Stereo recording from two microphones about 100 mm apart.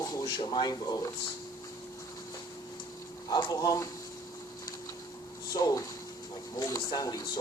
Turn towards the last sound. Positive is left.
turn(degrees=40)  # may be behind; listen again after turning